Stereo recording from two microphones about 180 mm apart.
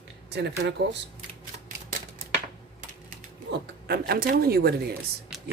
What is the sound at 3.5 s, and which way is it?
Speech, 70° right (ahead or behind).